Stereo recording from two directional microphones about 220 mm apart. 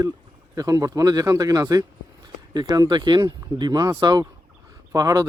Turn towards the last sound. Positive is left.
turn(degrees=-15)  # may be behind; listen again after turning